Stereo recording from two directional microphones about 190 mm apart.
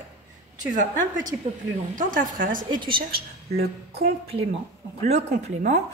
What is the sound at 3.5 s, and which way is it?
Speech, 55° right (ahead or behind).